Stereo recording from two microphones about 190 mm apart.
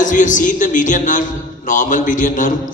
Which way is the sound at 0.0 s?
40° left (ahead or behind).